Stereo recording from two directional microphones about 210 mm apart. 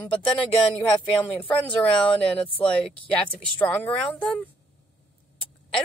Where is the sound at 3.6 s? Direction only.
5° left (ahead or behind).